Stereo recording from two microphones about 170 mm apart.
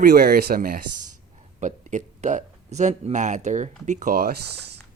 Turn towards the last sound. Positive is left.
turn(degrees=-60)  # may be behind; listen again after turning